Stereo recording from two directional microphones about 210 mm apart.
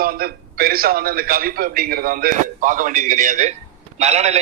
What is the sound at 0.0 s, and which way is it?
A man's voice, 45° right (ahead or behind).